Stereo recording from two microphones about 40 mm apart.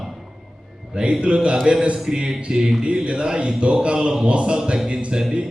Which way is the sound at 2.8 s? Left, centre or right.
Right.